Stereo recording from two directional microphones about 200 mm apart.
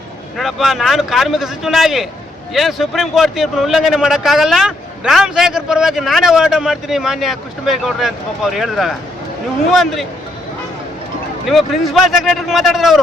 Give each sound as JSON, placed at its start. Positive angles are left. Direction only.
{"t": 0.3, "sound": "a man's voice", "side_deg": 0}
{"t": 11.4, "sound": "a man's voice", "side_deg": 0}